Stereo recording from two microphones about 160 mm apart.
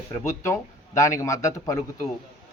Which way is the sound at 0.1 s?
20° left (ahead or behind).